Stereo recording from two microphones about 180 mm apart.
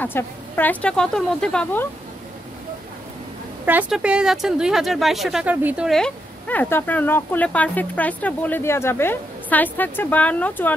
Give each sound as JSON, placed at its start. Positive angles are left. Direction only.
{"t": 0.0, "sound": "speech", "side_deg": 10}
{"t": 3.6, "sound": "speech", "side_deg": -10}